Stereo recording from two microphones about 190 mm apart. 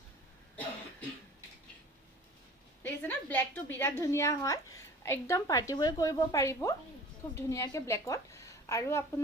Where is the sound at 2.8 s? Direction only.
10° left (ahead or behind).